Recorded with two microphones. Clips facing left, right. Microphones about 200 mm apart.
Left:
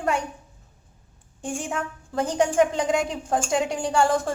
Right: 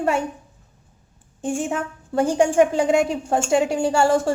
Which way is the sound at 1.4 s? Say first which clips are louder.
Right 5 dB; 5° right (ahead or behind).